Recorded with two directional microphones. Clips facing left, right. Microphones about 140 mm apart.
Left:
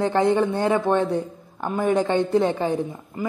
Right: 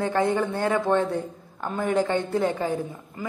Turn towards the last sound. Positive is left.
turn(degrees=25)  # may be behind; listen again after turning